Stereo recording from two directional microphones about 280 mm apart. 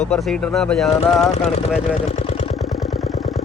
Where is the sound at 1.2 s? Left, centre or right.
Left.